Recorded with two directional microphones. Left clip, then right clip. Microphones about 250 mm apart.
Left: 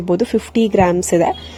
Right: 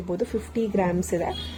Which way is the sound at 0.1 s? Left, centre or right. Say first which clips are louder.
Left 11 dB; left.